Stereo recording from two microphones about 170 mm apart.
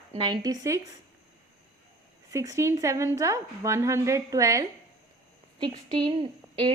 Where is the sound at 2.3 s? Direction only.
20° right (ahead or behind).